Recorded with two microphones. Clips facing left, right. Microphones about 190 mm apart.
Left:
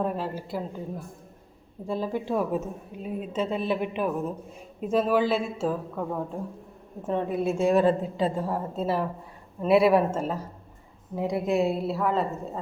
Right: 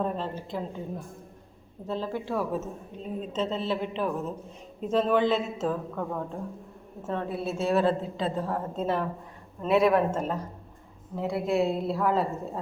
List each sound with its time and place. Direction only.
0.0 s a woman's voice: 10° left (ahead or behind)
1.9 s a woman's voice: 15° left (ahead or behind)
11.9 s a woman's voice: centre (ahead or behind)